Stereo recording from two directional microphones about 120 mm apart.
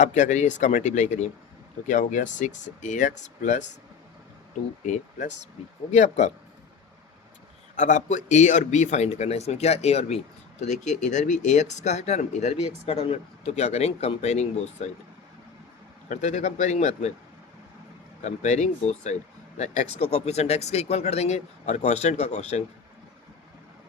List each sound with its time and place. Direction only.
0.0 s speech: 90° left
5.9 s speech: 70° left (ahead or behind)
7.8 s speech: 90° left; by 10.2 s 60° left (ahead or behind)
10.6 s speech: 85° left; by 14.9 s 65° left (ahead or behind)
16.0 s speech: 80° left
18.2 s speech: 75° left (ahead or behind)